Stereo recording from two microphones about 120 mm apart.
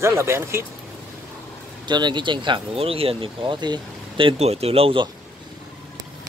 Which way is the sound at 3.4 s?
35° right (ahead or behind).